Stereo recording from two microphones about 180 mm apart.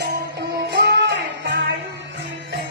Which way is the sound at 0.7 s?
65° right (ahead or behind).